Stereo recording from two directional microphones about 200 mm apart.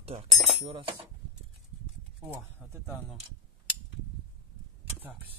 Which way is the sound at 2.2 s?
10° right (ahead or behind).